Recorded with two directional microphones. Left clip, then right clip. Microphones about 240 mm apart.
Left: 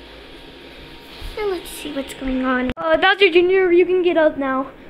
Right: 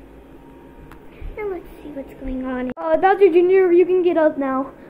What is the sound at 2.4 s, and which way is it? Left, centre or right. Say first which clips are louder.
Speech: left 6 dB; left.